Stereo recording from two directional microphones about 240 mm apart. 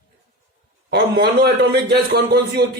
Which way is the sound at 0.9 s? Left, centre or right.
Right.